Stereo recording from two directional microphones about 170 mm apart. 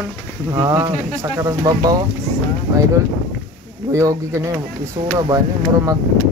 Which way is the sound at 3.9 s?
20° right (ahead or behind).